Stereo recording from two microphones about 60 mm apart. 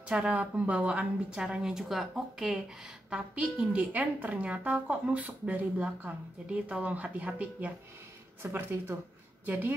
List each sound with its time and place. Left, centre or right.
0.1 s a woman's voice: centre
3.1 s a woman's voice: right
8.4 s speech: right